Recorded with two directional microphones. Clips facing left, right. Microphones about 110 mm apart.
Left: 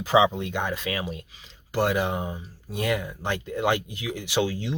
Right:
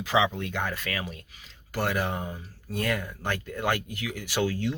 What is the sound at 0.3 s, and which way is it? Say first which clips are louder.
Speech: left 3 dB; 20° left (ahead or behind).